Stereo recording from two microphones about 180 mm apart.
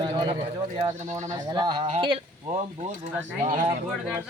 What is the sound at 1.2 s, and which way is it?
Speech, 20° right (ahead or behind).